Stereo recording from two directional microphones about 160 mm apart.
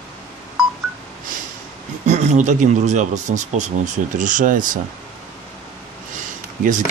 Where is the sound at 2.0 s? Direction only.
45° right (ahead or behind).